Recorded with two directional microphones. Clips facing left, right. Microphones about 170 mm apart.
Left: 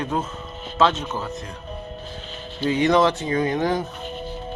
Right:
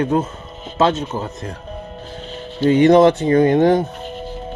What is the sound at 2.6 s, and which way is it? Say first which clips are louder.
Speech: right 8 dB; 55° right (ahead or behind).